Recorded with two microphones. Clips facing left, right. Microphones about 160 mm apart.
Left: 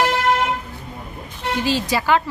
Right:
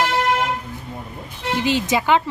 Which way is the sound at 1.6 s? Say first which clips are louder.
Right 1 dB; 20° right (ahead or behind).